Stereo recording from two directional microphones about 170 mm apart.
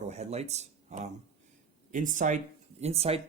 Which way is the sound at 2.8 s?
35° right (ahead or behind).